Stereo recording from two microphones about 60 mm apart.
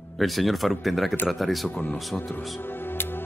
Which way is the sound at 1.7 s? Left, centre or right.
Left.